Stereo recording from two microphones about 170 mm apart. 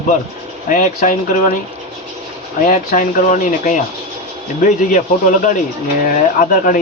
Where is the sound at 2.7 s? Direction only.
50° left (ahead or behind).